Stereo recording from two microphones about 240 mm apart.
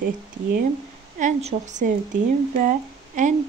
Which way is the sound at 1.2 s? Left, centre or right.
Right.